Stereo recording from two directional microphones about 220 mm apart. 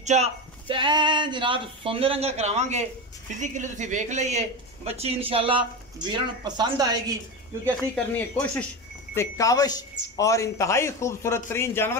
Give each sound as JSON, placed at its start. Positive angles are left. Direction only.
{"t": 0.0, "sound": "speech", "side_deg": -30}
{"t": 7.9, "sound": "speech", "side_deg": 5}